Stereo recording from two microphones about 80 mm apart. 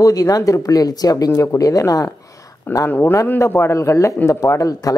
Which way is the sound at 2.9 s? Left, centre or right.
Left.